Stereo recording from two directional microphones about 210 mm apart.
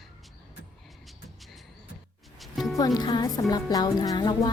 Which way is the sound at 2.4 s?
Centre (ahead or behind).